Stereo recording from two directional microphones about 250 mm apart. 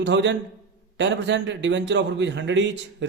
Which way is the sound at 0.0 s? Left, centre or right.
Right.